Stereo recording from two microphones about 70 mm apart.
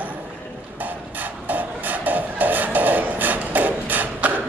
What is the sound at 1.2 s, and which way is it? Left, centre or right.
Music, right.